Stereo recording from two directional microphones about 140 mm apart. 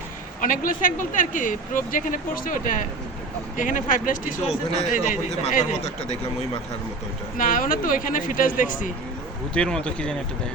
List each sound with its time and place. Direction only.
0.4 s a man's voice: 80° left; by 5.2 s 60° left (ahead or behind)
5.8 s speech: 50° left (ahead or behind)
7.3 s speech: 75° left (ahead or behind)
9.6 s speech: 5° left (ahead or behind)